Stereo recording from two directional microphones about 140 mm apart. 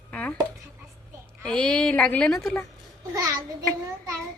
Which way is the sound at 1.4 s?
5° left (ahead or behind).